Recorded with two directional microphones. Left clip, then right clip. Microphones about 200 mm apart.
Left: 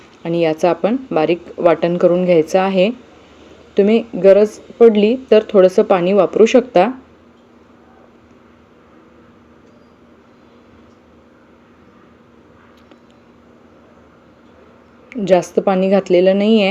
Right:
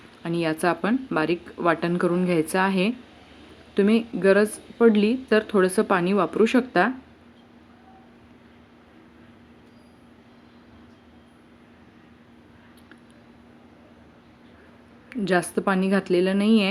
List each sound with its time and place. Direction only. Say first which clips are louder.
0.2 s a woman's voice: left 10 dB; 5° right (ahead or behind)
15.1 s speech: left 10 dB; 5° right (ahead or behind)